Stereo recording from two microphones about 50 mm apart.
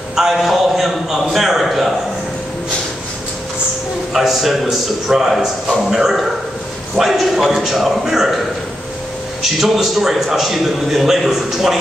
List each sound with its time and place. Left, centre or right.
0.1 s a sound: centre
4.1 s a man's voice: centre
9.4 s a man's voice: centre